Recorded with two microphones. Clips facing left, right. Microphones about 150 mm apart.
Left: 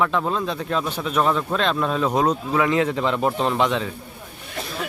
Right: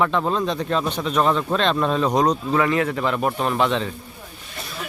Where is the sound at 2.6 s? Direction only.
20° left (ahead or behind).